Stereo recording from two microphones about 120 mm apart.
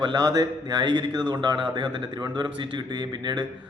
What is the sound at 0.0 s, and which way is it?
Speech, 35° right (ahead or behind).